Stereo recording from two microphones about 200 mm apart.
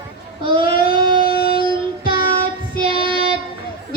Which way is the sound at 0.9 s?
25° right (ahead or behind).